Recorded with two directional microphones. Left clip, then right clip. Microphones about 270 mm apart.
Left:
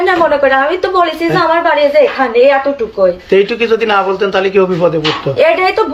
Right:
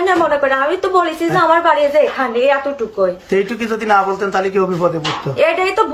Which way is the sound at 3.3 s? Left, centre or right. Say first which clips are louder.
Left 7 dB; centre.